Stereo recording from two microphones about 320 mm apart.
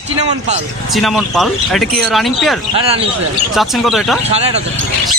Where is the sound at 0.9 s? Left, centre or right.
Centre.